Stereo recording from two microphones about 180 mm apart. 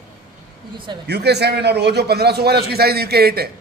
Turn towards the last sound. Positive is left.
turn(degrees=-60)  # may be behind; listen again after turning